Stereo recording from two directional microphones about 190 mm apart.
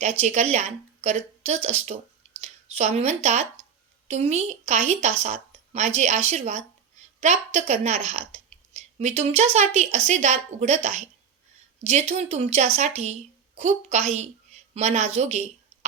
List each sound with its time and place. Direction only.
0.2 s speech: 35° right (ahead or behind)
11.8 s a woman's voice: 35° right (ahead or behind)